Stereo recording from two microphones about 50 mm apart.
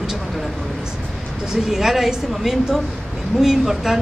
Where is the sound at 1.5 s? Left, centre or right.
Centre.